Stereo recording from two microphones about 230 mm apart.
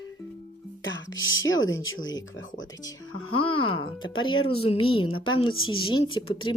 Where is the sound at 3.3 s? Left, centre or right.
Left.